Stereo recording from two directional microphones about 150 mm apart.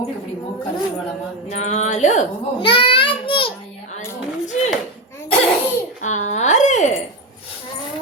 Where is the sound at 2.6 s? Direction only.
35° left (ahead or behind).